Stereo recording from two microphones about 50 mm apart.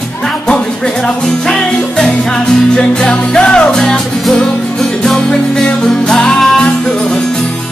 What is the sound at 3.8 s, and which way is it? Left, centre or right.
Music, centre.